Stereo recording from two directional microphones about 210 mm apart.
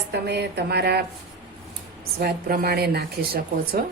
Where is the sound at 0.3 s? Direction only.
50° right (ahead or behind).